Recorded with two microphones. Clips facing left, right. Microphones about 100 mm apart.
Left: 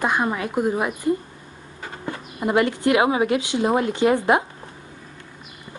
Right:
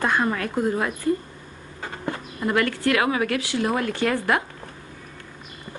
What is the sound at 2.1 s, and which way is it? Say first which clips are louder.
Speech: left 2 dB; 20° left (ahead or behind).